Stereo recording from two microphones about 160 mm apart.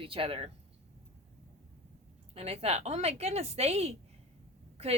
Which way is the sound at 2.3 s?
40° right (ahead or behind).